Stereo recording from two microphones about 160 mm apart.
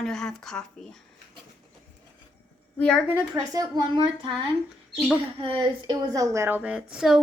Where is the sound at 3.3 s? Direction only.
25° right (ahead or behind); by 7.2 s 5° right (ahead or behind).